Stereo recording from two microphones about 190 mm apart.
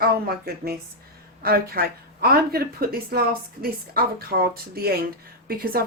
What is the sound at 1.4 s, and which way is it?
Speech, 50° right (ahead or behind).